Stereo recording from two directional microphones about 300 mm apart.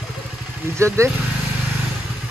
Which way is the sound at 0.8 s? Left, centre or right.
Centre.